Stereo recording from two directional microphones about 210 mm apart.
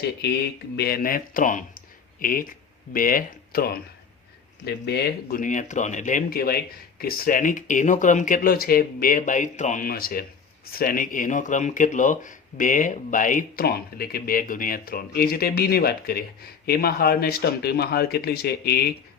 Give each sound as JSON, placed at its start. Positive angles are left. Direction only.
{"t": 0.8, "sound": "speech", "side_deg": 45}